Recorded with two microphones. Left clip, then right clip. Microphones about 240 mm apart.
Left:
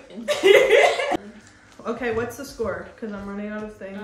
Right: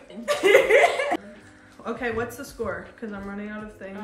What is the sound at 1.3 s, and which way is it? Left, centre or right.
Speech, centre.